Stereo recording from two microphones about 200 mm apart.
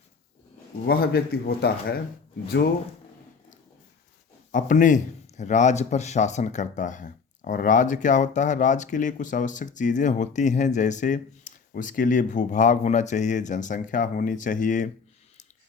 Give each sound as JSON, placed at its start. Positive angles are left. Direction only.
{"t": 0.9, "sound": "speech", "side_deg": 50}
{"t": 4.5, "sound": "speech", "side_deg": 40}